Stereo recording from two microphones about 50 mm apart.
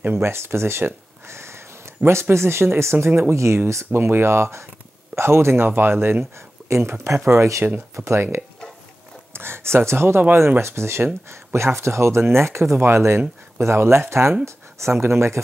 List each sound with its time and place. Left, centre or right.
0.1 s speech: right
2.0 s speech: right
2.3 s speech: right
3.9 s speech: right
7.9 s speech: right
9.3 s speech: right